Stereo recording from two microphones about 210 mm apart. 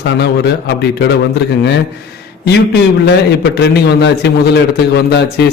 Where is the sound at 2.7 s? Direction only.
55° left (ahead or behind).